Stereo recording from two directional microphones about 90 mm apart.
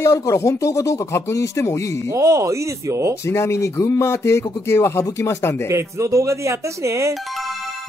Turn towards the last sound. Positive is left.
turn(degrees=0)  # may be behind; listen again after turning